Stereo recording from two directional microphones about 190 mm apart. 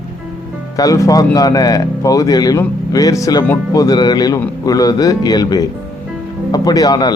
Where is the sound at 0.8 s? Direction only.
15° left (ahead or behind).